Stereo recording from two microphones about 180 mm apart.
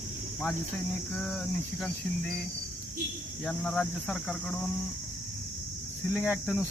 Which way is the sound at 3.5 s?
5° left (ahead or behind).